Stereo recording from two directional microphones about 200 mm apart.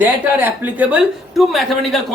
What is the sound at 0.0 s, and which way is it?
A woman's voice, 10° right (ahead or behind).